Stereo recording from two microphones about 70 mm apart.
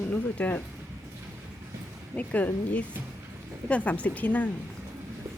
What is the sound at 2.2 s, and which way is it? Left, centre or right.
Speech, left.